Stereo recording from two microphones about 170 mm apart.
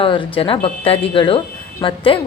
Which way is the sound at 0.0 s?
30° left (ahead or behind).